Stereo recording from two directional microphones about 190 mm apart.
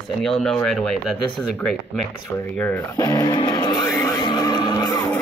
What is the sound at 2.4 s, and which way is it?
Speech, 5° left (ahead or behind).